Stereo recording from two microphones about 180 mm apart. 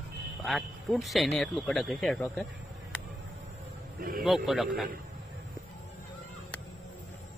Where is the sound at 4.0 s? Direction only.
50° right (ahead or behind).